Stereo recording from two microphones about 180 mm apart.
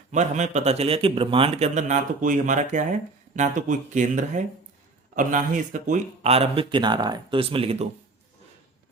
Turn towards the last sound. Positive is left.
turn(degrees=-35)  # may be behind; listen again after turning